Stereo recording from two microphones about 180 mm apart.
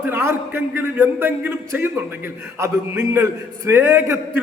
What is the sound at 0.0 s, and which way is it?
A man's voice, 15° right (ahead or behind).